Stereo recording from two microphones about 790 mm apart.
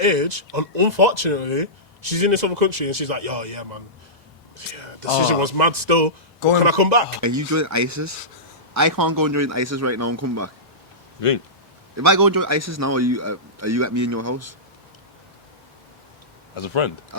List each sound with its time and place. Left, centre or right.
0.0 s speech: right
7.2 s speech: right
11.2 s speech: left
11.9 s speech: right
16.6 s speech: left